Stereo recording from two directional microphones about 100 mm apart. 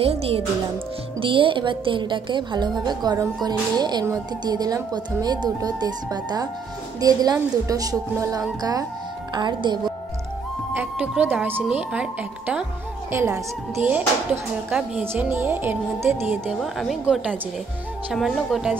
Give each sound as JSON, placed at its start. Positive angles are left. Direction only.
{"t": 0.0, "sound": "speech", "side_deg": -80}
{"t": 1.2, "sound": "a woman's voice", "side_deg": -60}
{"t": 10.8, "sound": "speech", "side_deg": -15}
{"t": 13.1, "sound": "speech", "side_deg": -30}
{"t": 16.5, "sound": "a woman's voice", "side_deg": 0}